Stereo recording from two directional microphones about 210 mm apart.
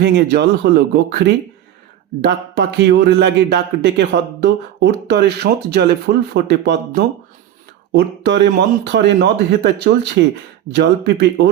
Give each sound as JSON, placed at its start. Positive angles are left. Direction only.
{"t": 0.0, "sound": "speech", "side_deg": -50}